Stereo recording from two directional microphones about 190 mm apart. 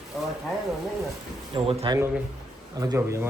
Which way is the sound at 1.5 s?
25° right (ahead or behind).